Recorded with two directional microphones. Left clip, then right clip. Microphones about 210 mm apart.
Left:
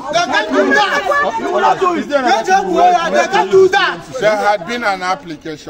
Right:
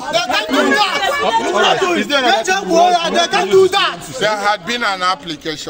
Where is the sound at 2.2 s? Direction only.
15° right (ahead or behind).